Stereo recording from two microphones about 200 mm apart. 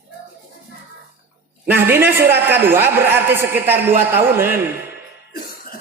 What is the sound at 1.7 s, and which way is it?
A man's voice, 10° right (ahead or behind).